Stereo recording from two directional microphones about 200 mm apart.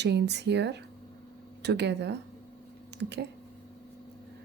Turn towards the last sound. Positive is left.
turn(degrees=-55)  # may be behind; listen again after turning